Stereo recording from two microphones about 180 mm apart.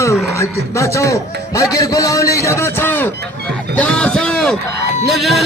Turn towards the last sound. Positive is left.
turn(degrees=0)  # may be behind; listen again after turning